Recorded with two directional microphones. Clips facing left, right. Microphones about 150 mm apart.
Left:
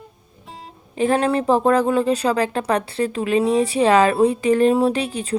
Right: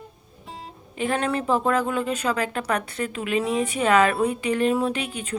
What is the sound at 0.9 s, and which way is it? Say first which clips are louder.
Speech: left 6 dB; 35° left (ahead or behind).